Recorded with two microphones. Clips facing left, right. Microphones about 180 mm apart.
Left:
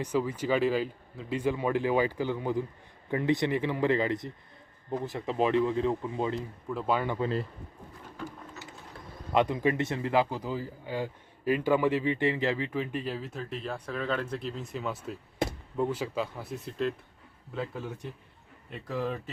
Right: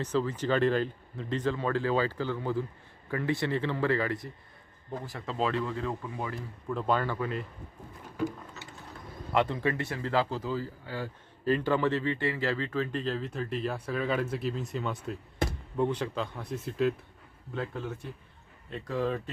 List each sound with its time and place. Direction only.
0.0 s speech: 10° left (ahead or behind)
6.7 s speech: 5° left (ahead or behind)
7.2 s speech: 30° left (ahead or behind)
9.3 s speech: 15° left (ahead or behind)